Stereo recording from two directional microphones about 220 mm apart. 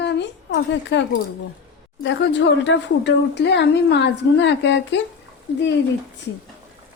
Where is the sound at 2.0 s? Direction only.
55° left (ahead or behind).